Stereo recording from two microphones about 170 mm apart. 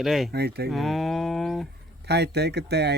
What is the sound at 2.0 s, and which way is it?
Speech, 75° right (ahead or behind).